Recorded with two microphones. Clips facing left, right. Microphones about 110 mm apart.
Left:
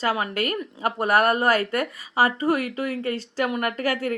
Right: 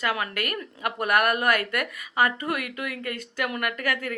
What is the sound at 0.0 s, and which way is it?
A woman's voice, 30° left (ahead or behind).